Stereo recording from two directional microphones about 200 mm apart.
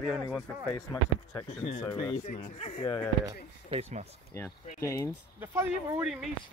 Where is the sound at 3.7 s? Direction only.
30° right (ahead or behind).